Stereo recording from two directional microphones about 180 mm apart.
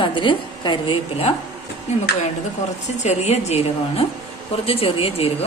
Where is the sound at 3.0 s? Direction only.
40° left (ahead or behind).